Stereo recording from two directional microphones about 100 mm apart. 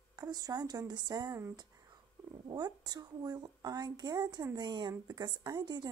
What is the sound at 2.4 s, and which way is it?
A woman's voice, 45° right (ahead or behind).